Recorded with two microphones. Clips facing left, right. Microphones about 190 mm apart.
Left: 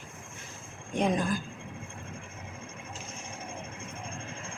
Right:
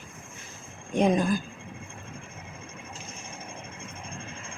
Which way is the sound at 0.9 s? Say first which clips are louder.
Right 5 dB; 15° right (ahead or behind).